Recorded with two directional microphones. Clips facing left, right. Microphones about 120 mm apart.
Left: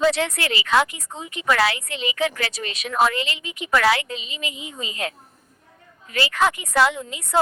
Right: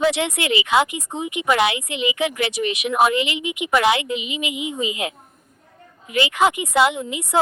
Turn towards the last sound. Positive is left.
turn(degrees=-20)  # may be behind; listen again after turning